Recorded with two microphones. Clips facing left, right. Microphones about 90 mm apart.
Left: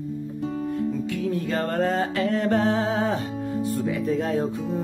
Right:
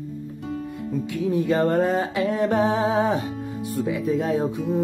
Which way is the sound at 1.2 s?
20° right (ahead or behind).